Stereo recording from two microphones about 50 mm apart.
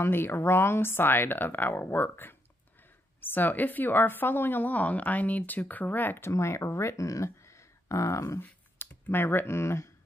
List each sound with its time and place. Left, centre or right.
0.0 s a woman's voice: left
6.2 s speech: left
8.4 s a sound: left
9.6 s speech: left